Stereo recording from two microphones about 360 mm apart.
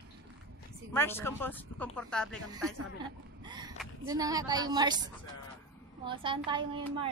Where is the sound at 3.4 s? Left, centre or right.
Centre.